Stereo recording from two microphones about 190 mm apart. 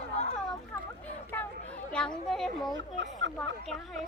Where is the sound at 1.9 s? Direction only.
5° left (ahead or behind).